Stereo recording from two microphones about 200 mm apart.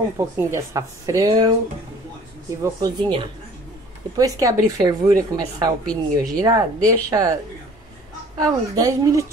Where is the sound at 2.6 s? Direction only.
20° right (ahead or behind).